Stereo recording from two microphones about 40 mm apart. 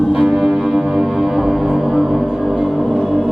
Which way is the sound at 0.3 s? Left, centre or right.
Centre.